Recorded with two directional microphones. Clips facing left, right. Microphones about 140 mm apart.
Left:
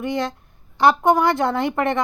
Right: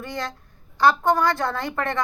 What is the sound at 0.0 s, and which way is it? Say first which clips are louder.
A woman's voice: left 7 dB; 20° left (ahead or behind).